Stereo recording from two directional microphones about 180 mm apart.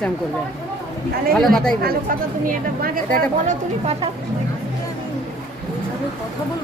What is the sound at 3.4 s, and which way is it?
Speech, 35° right (ahead or behind).